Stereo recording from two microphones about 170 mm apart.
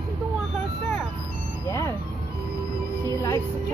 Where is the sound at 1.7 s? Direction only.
20° left (ahead or behind).